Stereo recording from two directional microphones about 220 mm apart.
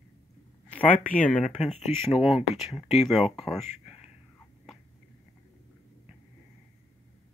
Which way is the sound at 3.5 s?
30° left (ahead or behind).